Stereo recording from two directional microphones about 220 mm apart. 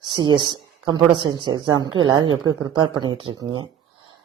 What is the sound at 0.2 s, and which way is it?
Speech, 20° right (ahead or behind).